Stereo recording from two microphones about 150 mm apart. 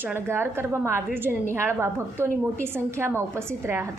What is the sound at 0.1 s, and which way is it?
A woman's voice, 15° right (ahead or behind).